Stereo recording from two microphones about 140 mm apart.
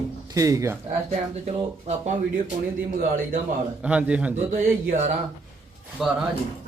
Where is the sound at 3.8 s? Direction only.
10° right (ahead or behind).